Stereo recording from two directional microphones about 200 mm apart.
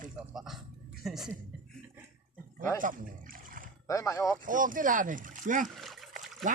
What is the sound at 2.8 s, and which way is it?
Speech, 40° right (ahead or behind).